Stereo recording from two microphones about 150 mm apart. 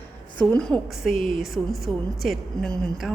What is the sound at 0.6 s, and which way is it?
A woman's voice, centre (ahead or behind).